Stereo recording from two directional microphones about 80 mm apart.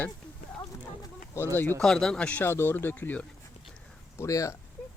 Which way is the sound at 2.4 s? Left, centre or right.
Left.